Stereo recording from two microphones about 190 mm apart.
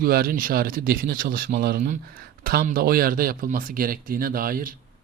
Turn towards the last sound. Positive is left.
turn(degrees=-50)  # may be behind; listen again after turning